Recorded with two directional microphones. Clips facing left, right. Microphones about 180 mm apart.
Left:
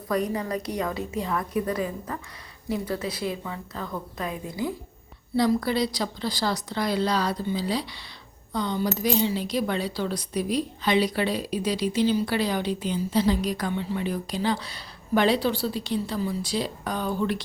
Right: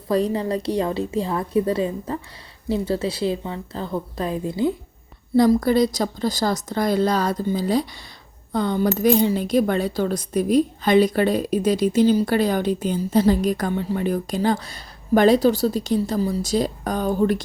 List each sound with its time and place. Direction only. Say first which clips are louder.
0.1 s a woman's voice: right 5 dB; 30° right (ahead or behind)
5.3 s speech: right 7 dB; 45° right (ahead or behind)